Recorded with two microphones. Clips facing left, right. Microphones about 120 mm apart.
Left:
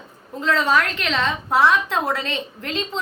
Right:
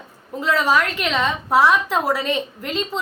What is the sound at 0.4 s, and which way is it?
A woman's voice, 10° right (ahead or behind).